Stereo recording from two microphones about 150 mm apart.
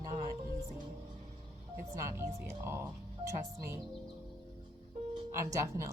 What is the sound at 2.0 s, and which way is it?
Speech, 20° right (ahead or behind).